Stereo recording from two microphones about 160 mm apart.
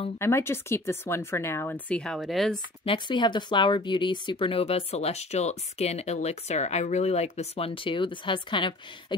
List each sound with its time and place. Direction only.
0.2 s speech: 15° left (ahead or behind)
2.8 s speech: 30° left (ahead or behind)